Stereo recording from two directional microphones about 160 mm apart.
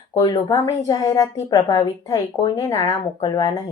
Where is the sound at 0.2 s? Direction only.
25° left (ahead or behind).